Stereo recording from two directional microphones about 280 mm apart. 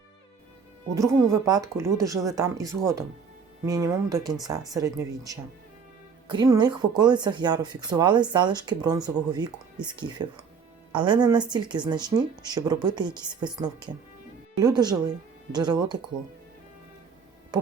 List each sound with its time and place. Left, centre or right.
1.3 s speech: centre
17.5 s music: centre